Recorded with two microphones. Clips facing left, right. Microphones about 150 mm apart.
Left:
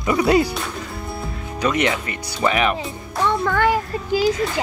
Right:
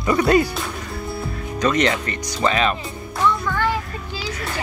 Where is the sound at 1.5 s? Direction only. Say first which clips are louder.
Right 1 dB; 10° left (ahead or behind).